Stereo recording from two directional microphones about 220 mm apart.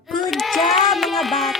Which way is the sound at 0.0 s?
Centre (ahead or behind).